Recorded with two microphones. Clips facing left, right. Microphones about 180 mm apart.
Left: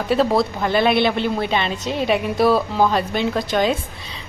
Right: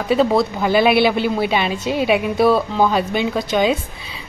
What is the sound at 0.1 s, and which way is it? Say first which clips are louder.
A woman's voice: right 2 dB; centre (ahead or behind).